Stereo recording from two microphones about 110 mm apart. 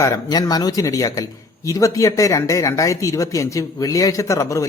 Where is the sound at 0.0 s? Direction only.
30° left (ahead or behind).